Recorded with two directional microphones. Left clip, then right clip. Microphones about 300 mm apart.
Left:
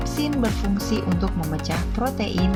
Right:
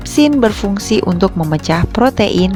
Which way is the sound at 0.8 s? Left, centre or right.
Right.